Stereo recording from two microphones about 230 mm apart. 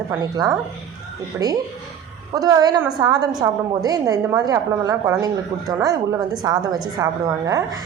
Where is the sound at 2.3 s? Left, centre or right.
Centre.